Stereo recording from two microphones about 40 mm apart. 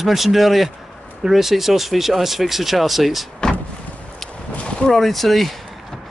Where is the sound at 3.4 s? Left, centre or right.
Left.